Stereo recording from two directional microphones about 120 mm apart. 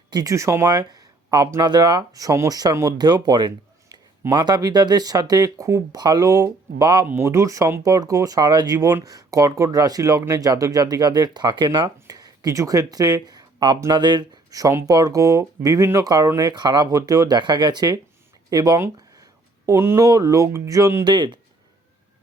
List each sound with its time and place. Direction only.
0.1 s speech: 30° right (ahead or behind)
7.0 s speech: 20° right (ahead or behind); by 21.3 s 35° right (ahead or behind)